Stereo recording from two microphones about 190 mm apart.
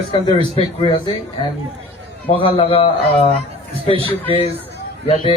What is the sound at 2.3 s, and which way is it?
A man's voice, 30° left (ahead or behind).